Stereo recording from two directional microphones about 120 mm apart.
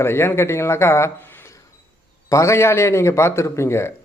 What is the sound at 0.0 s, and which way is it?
A man's voice, 20° left (ahead or behind).